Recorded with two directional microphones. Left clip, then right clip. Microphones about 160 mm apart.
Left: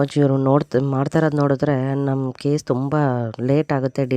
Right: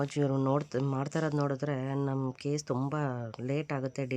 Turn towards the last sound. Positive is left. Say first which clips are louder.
# left 14 dB
turn(degrees=55)  # may be behind; listen again after turning